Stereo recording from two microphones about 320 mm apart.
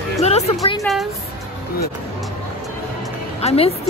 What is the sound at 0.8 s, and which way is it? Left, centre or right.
Speech, centre.